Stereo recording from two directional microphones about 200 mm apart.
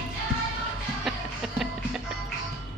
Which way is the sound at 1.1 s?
Centre (ahead or behind).